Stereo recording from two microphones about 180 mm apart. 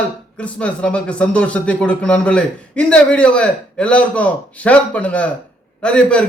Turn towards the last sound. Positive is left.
turn(degrees=5)  # may be behind; listen again after turning